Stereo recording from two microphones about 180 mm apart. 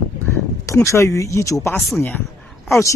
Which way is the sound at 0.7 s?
15° left (ahead or behind).